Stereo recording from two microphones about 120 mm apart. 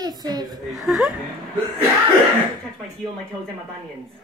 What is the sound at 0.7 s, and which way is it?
Speech, centre (ahead or behind).